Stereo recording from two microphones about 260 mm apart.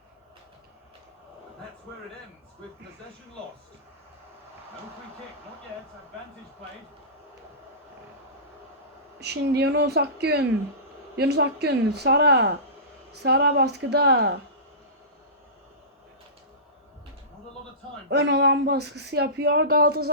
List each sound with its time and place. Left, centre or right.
9.2 s speech: right
18.1 s speech: right